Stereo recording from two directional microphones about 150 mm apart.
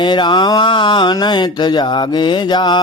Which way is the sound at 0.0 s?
30° left (ahead or behind).